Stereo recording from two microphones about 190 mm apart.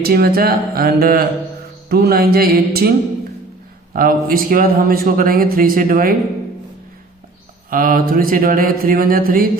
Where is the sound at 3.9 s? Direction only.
50° right (ahead or behind).